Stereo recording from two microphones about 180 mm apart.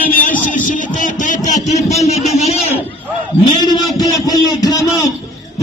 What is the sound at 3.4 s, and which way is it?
A man's voice, 25° left (ahead or behind).